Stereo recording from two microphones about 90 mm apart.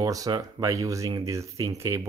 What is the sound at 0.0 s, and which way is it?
Speech, 40° right (ahead or behind).